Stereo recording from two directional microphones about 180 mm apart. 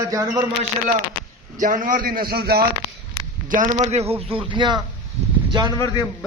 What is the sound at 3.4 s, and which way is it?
A man's voice, 45° right (ahead or behind).